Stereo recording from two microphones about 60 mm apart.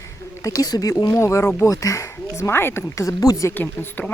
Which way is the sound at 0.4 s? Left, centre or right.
Left.